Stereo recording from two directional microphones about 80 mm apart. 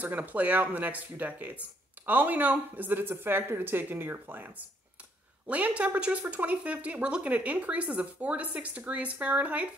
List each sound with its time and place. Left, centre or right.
0.0 s speech: right
5.5 s speech: centre